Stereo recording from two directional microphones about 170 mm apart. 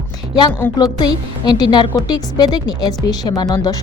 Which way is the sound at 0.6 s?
20° left (ahead or behind).